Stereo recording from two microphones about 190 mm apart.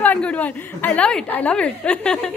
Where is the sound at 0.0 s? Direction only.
5° left (ahead or behind).